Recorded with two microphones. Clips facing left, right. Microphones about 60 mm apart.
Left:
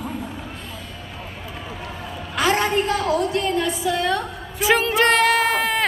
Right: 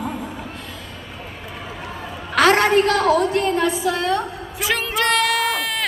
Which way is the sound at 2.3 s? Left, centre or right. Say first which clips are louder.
Right 5 dB; right.